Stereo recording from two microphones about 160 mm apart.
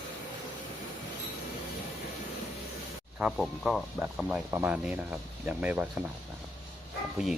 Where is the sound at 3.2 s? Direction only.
Centre (ahead or behind).